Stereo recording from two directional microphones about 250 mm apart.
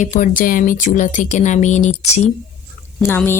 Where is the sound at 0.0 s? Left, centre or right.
Left.